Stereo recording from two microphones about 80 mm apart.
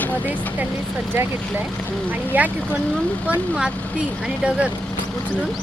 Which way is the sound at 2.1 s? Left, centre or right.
Right.